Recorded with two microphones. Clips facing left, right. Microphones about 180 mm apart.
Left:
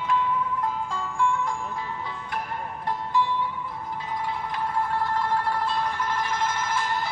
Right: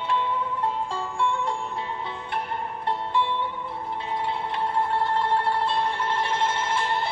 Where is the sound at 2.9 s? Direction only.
25° right (ahead or behind).